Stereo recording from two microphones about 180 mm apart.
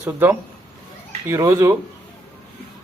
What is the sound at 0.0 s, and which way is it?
Speech, 10° right (ahead or behind).